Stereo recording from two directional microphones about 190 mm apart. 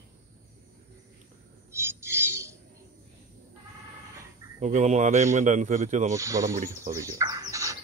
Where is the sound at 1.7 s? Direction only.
15° right (ahead or behind).